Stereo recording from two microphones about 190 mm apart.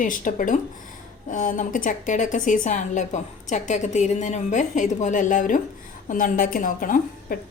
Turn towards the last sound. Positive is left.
turn(degrees=45)  # may be behind; listen again after turning